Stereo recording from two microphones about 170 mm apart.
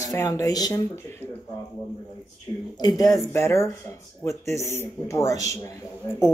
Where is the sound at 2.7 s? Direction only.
25° left (ahead or behind).